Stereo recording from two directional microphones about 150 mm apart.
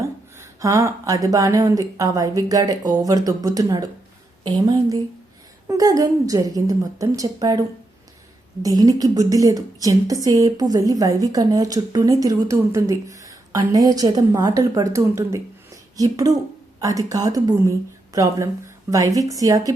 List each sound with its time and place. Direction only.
0.0 s a woman's voice: 20° right (ahead or behind)
8.6 s a woman's voice: 25° right (ahead or behind)